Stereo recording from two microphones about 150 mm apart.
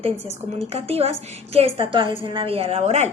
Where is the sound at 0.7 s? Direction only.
45° right (ahead or behind).